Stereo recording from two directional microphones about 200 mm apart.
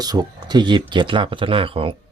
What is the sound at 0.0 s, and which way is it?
Speech, 20° right (ahead or behind).